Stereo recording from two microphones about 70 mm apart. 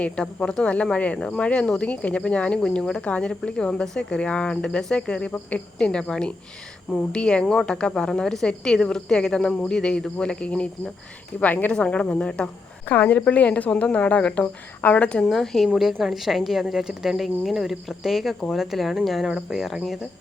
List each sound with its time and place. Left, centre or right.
0.0 s a woman's voice: centre
15.2 s a woman's voice: centre